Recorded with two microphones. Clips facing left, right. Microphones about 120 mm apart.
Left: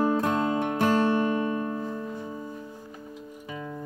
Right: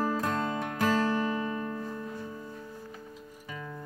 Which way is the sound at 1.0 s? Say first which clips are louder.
Left 5 dB; 65° left (ahead or behind).